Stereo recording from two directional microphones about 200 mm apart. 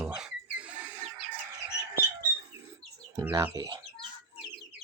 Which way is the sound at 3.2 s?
20° right (ahead or behind).